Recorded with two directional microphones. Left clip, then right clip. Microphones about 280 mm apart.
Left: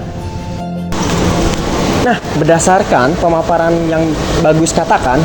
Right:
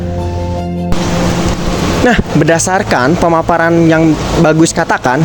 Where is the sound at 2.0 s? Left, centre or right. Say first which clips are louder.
Right 3 dB; right.